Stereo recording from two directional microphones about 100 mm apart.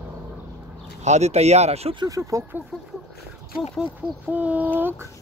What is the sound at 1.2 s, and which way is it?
Speech, 90° right.